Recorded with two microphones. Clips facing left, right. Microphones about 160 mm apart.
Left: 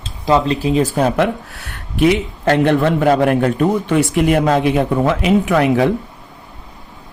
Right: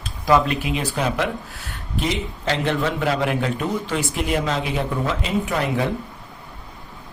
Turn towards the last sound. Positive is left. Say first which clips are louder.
# left 8 dB
turn(degrees=75)  # may be behind; listen again after turning